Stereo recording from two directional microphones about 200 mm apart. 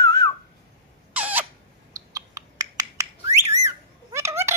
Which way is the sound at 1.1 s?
10° right (ahead or behind).